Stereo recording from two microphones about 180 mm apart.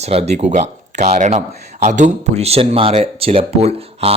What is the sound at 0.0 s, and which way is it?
Speech, 35° right (ahead or behind).